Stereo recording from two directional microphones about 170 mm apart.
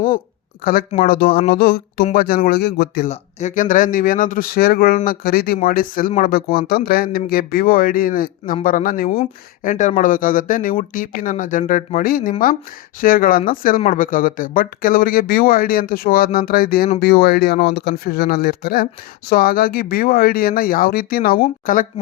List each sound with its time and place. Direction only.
0.6 s speech: 60° left (ahead or behind)
3.1 s speech: 45° left (ahead or behind)